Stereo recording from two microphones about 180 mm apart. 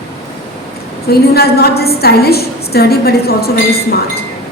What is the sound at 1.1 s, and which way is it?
A woman's voice, 60° left (ahead or behind).